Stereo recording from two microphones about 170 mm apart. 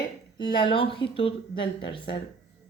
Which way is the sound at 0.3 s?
25° left (ahead or behind).